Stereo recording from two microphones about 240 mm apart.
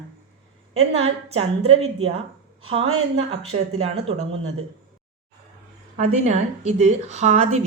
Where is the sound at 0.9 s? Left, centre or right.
Right.